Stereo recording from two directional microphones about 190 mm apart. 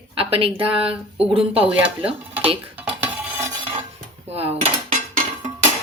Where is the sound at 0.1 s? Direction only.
30° right (ahead or behind).